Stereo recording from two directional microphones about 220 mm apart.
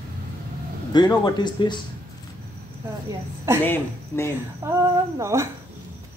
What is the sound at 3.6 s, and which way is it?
Speech, 10° left (ahead or behind).